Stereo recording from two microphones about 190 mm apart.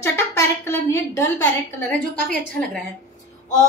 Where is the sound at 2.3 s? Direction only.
5° left (ahead or behind).